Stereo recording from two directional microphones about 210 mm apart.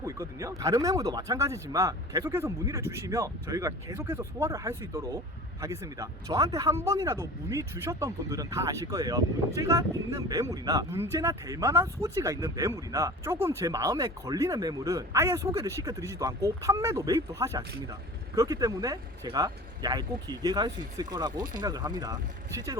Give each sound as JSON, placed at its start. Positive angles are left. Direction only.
{"t": 0.0, "sound": "speech", "side_deg": -15}